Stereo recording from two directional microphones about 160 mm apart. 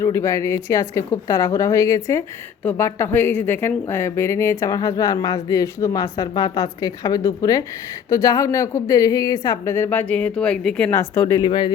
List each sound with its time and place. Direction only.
0.0 s a woman's voice: 15° left (ahead or behind)
11.3 s speech: 25° left (ahead or behind)